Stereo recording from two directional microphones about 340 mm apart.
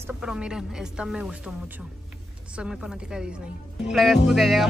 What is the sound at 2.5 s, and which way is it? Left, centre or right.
Speech, centre.